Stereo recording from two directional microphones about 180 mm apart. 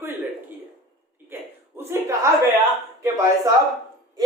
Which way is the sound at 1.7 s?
15° right (ahead or behind).